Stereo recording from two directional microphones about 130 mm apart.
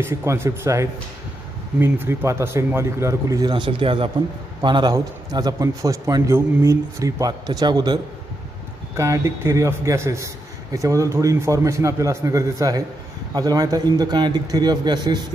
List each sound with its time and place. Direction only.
0.0 s a man's voice: 20° right (ahead or behind)